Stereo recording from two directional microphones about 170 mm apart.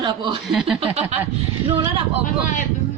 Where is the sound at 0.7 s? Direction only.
35° right (ahead or behind).